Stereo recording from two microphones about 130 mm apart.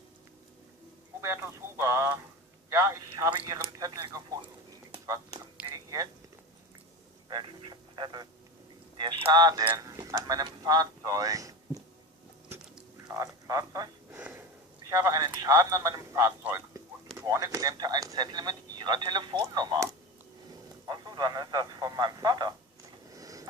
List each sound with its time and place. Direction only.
1.2 s a man's voice: 20° right (ahead or behind)
5.7 s a sound: 30° right (ahead or behind)
7.3 s a man's voice: 35° right (ahead or behind)
13.1 s speech: 25° right (ahead or behind)
14.2 s sniff: 10° right (ahead or behind)
14.8 s a man's voice: 25° right (ahead or behind)
23.1 s a sound: 25° right (ahead or behind)